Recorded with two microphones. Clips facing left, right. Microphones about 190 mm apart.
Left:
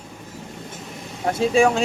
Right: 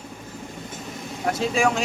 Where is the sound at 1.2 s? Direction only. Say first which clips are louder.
Left 5 dB; 30° left (ahead or behind).